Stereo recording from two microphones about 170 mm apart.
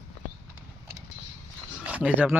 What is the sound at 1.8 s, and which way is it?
Speech, 10° right (ahead or behind).